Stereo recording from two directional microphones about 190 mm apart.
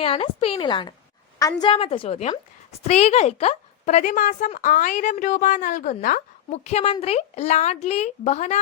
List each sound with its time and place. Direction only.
0.0 s a woman's voice: 30° left (ahead or behind)